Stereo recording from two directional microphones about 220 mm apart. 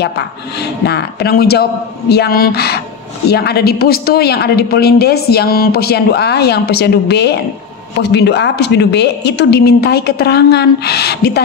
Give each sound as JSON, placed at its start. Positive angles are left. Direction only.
{"t": 0.8, "sound": "a woman's voice", "side_deg": 45}